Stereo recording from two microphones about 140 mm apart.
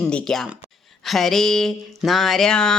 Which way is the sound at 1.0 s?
Centre (ahead or behind).